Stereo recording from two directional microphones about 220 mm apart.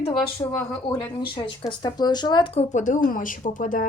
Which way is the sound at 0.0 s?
25° left (ahead or behind).